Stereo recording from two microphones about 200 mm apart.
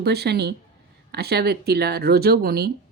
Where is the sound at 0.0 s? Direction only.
55° right (ahead or behind).